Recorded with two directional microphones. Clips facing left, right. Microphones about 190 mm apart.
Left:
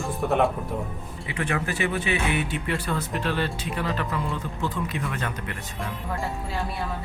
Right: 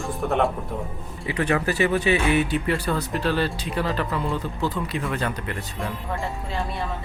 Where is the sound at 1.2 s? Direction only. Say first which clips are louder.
Right 5 dB; 40° right (ahead or behind).